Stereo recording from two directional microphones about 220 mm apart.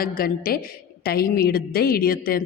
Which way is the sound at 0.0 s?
40° left (ahead or behind).